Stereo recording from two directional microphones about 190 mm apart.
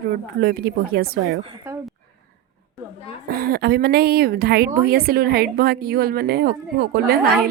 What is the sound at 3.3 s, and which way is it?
A woman's voice, 55° right (ahead or behind).